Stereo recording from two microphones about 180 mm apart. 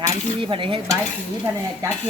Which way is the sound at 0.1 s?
25° right (ahead or behind).